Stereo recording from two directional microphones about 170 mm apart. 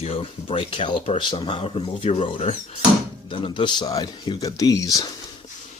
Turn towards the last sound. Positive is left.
turn(degrees=20)  # may be behind; listen again after turning